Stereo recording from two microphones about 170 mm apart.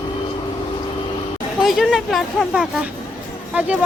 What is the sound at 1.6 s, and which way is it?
Speech, centre (ahead or behind).